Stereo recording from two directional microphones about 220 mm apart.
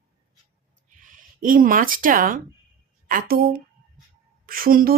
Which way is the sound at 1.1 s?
40° right (ahead or behind).